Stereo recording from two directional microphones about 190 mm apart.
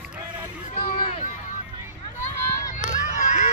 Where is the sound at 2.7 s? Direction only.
40° left (ahead or behind).